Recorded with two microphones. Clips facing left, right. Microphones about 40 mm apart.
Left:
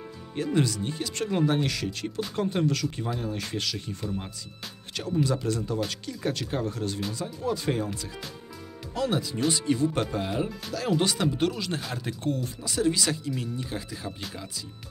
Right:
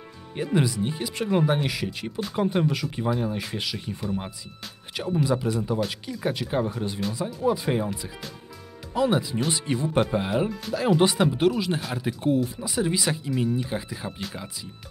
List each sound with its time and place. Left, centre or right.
0.4 s speech: centre
4.9 s speech: centre